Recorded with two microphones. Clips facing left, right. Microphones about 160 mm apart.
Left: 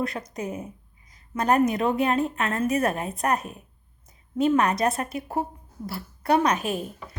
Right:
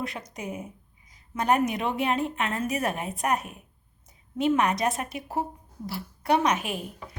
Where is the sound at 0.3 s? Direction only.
10° right (ahead or behind).